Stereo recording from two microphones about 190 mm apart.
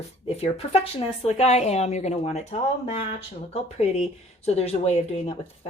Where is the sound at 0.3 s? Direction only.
35° left (ahead or behind).